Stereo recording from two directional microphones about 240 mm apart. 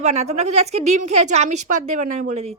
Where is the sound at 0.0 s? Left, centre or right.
Right.